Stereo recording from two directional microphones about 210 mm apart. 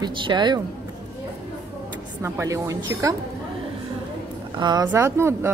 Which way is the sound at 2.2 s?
15° right (ahead or behind).